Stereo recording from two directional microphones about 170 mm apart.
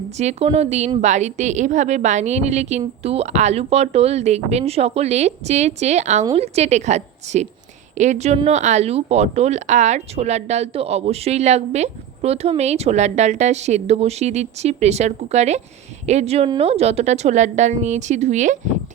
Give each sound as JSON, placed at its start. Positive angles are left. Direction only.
{"t": 0.2, "sound": "a woman's voice", "side_deg": -40}